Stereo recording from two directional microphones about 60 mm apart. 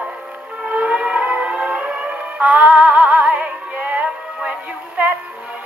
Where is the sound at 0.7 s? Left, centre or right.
Right.